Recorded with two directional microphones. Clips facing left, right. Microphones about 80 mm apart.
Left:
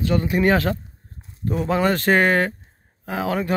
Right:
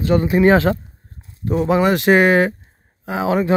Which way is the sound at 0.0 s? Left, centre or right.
Right.